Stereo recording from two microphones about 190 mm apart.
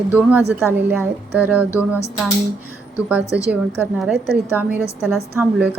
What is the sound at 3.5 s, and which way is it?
A woman's voice, 10° right (ahead or behind).